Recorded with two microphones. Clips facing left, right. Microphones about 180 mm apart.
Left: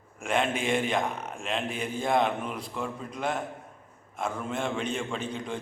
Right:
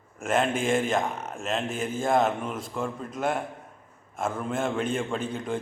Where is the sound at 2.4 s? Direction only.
Centre (ahead or behind).